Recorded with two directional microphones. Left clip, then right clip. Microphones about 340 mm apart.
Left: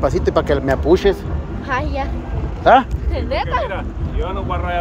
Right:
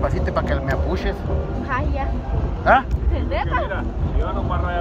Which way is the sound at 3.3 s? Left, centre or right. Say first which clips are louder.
Left 3 dB; left.